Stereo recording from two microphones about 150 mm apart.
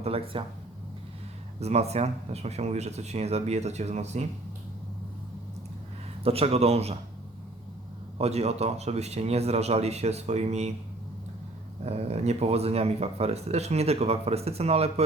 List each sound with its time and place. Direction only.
0.0 s speech: 40° right (ahead or behind)
1.5 s speech: 45° right (ahead or behind)
6.2 s speech: 40° right (ahead or behind)
8.2 s speech: 45° right (ahead or behind)
11.8 s speech: 45° right (ahead or behind)